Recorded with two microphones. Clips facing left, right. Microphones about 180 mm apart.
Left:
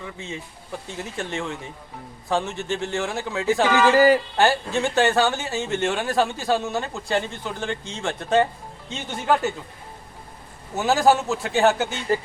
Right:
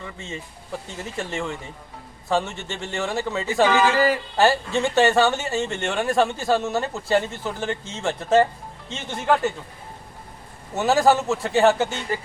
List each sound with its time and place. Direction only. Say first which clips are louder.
0.0 s speech: left 1 dB; centre (ahead or behind)
3.9 s speech: left 5 dB; 40° left (ahead or behind)
4.4 s speech: right 1 dB; centre (ahead or behind)
10.8 s speech: right 1 dB; centre (ahead or behind)